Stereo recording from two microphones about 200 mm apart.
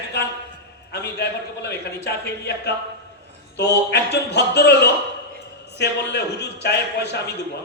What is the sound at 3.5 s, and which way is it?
A man's voice, 55° left (ahead or behind).